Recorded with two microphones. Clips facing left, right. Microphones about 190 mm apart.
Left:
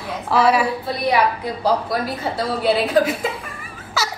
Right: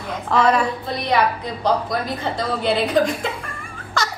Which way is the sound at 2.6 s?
5° left (ahead or behind).